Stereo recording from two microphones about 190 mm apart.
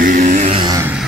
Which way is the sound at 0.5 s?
25° right (ahead or behind).